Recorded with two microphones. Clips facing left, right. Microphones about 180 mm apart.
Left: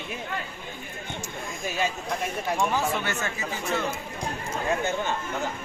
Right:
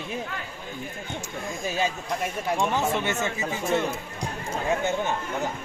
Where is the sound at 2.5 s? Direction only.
20° right (ahead or behind).